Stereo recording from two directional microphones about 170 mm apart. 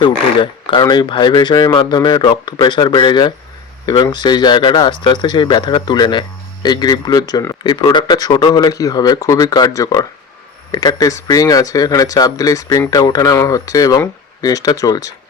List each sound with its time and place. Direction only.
0.0 s speech: 30° left (ahead or behind)